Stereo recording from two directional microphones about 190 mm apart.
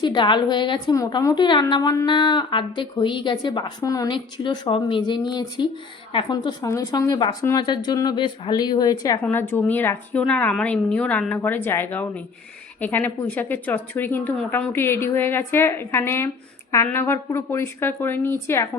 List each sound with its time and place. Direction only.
0.0 s a woman's voice: 25° left (ahead or behind)